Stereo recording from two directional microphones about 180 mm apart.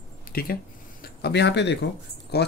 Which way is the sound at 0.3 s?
55° left (ahead or behind).